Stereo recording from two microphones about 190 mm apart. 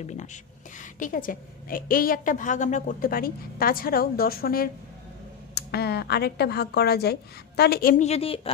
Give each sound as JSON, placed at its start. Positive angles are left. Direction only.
{"t": 0.0, "sound": "a woman's voice", "side_deg": 40}
{"t": 8.1, "sound": "a woman's voice", "side_deg": 30}